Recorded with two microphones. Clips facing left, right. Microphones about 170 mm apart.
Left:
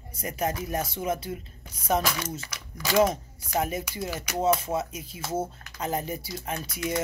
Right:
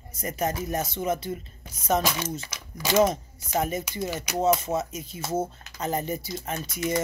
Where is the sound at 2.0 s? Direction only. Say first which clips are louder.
Right 2 dB; 20° right (ahead or behind).